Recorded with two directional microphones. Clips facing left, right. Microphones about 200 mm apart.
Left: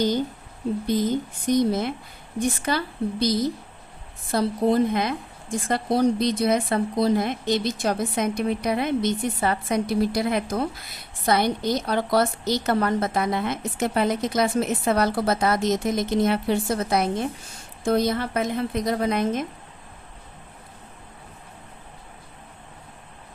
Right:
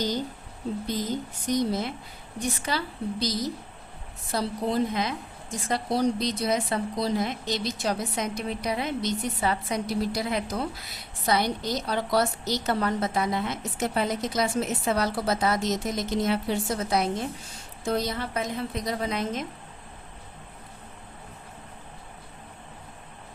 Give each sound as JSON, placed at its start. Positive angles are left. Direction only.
{"t": 1.5, "sound": "a woman's voice", "side_deg": 55}